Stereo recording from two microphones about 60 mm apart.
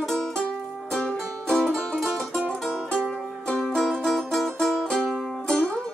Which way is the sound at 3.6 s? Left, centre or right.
Centre.